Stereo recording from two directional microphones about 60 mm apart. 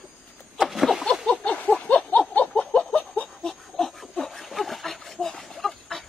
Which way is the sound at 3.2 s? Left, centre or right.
Centre.